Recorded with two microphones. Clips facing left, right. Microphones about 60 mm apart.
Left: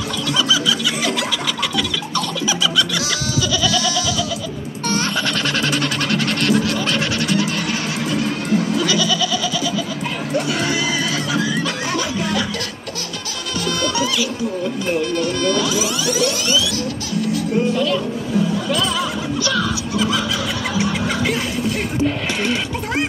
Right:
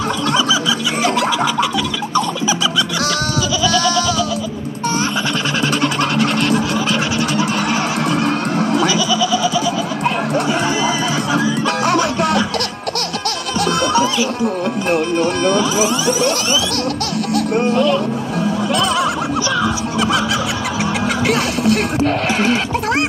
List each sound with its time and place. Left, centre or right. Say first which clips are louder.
5.8 s a sound: right 4 dB; centre
8.1 s music: right 2 dB; right
8.8 s goat: right 3 dB; centre
11.8 s music: right 7 dB; right
15.1 s music: right 4 dB; right
17.3 s music: right 3 dB; right
18.8 s music: right 4 dB; right
21.3 s music: right 5 dB; right